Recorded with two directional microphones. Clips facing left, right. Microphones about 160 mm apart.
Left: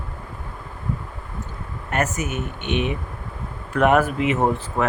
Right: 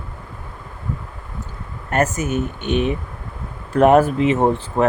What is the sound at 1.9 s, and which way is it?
Speech, 35° right (ahead or behind).